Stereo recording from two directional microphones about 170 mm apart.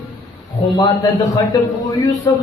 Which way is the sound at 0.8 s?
20° left (ahead or behind).